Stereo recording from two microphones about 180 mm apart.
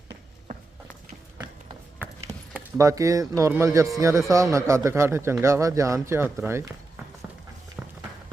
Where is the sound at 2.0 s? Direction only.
15° right (ahead or behind).